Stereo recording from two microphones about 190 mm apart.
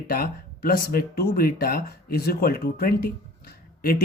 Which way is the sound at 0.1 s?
50° left (ahead or behind).